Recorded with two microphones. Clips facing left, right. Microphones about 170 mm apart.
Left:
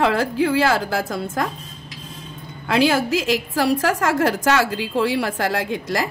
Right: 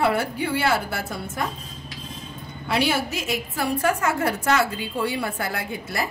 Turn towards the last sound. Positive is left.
turn(degrees=90)